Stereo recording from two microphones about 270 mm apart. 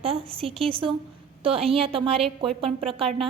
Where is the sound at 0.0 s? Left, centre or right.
Right.